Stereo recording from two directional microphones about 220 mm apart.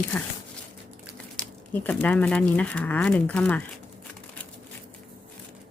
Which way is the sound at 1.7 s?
5° left (ahead or behind).